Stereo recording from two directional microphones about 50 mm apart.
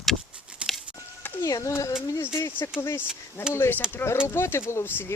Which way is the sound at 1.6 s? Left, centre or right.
Left.